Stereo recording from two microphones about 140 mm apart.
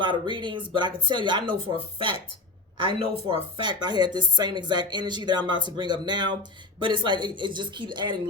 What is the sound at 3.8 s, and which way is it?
Speech, 30° right (ahead or behind).